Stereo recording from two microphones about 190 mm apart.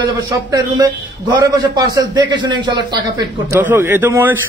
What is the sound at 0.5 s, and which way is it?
A man's voice, 20° right (ahead or behind).